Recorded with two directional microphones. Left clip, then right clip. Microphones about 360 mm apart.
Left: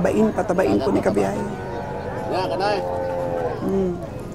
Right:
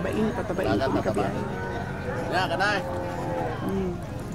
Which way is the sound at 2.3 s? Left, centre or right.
Right.